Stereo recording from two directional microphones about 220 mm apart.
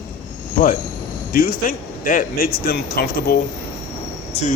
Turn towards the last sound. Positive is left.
turn(degrees=30)  # may be behind; listen again after turning